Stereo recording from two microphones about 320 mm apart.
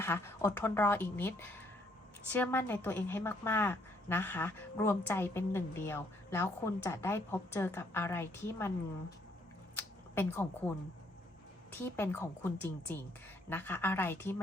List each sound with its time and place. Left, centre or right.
0.0 s a woman's voice: centre
9.7 s a sound: centre
11.8 s a woman's voice: centre